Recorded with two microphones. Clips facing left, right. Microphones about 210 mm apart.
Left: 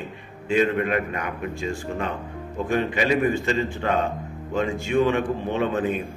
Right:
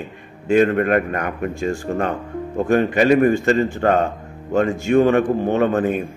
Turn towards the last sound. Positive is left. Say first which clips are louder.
# right 6 dB
turn(degrees=-50)  # may be behind; listen again after turning